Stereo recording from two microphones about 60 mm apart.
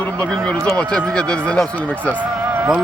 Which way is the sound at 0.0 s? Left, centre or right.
Centre.